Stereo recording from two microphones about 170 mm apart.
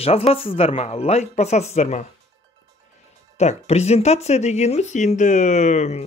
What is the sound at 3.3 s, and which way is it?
Speech, 40° left (ahead or behind).